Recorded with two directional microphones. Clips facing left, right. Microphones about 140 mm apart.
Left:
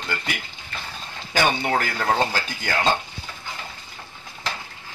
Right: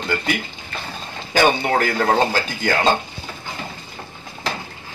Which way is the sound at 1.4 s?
45° right (ahead or behind).